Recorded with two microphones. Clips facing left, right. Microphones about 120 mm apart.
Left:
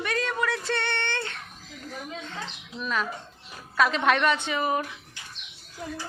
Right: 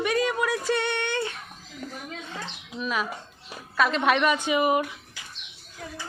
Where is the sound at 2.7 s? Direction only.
5° right (ahead or behind).